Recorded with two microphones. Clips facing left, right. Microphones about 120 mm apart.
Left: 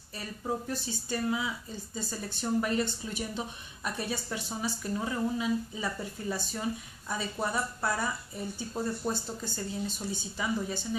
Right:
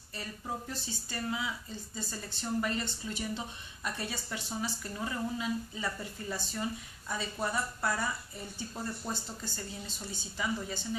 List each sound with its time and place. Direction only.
0.7 s speech: 15° left (ahead or behind)